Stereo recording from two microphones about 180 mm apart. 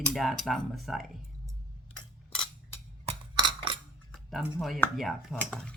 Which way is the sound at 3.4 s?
25° right (ahead or behind).